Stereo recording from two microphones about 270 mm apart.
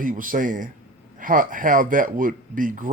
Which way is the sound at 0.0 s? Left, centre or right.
Right.